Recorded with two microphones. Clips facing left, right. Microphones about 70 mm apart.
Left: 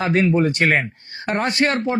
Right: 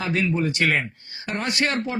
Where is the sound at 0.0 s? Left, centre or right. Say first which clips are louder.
Left 6 dB; left.